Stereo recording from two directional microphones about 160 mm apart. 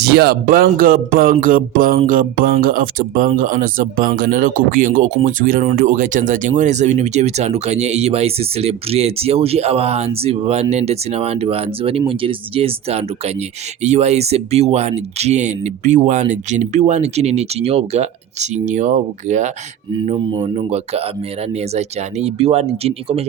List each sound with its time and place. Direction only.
0.0 s speech: 85° right; by 19.5 s 50° right (ahead or behind)
20.1 s speech: 30° right (ahead or behind)